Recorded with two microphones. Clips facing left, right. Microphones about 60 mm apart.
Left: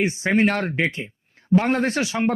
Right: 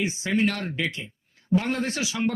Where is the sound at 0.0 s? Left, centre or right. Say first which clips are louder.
Left 5 dB; left.